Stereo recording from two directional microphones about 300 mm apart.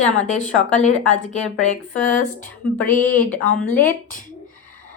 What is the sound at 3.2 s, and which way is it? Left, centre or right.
Speech, centre.